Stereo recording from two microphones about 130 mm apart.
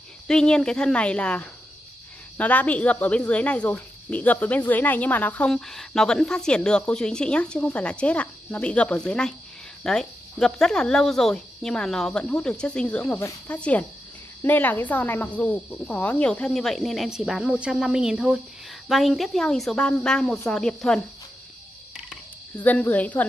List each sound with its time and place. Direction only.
0.3 s speech: 5° left (ahead or behind)
22.6 s speech: 15° left (ahead or behind)